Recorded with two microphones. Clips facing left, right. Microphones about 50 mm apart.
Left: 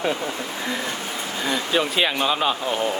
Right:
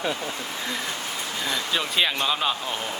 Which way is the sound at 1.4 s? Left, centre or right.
Centre.